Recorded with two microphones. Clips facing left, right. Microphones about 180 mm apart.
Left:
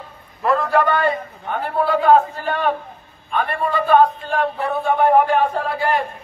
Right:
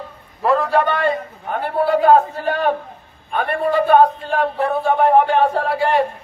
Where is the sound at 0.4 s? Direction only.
30° right (ahead or behind).